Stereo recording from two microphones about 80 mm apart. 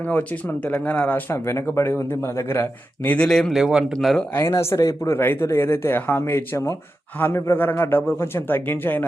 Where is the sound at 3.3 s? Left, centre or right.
Centre.